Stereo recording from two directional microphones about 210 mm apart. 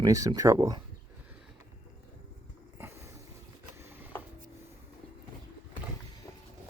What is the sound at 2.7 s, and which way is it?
Boat, 10° right (ahead or behind).